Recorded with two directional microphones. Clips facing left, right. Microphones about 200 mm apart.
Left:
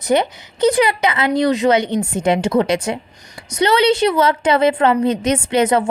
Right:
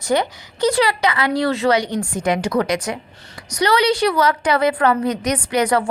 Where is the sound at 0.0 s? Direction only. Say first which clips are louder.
Left 3 dB; 20° left (ahead or behind).